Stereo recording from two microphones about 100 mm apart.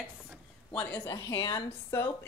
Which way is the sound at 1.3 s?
50° left (ahead or behind).